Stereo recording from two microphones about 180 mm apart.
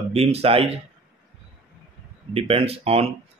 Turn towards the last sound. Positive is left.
turn(degrees=-35)  # may be behind; listen again after turning